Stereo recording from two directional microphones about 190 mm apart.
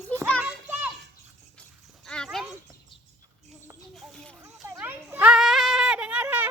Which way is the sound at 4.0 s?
5° left (ahead or behind).